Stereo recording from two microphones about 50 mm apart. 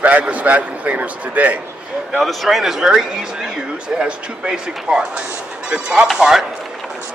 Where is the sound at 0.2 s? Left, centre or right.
Right.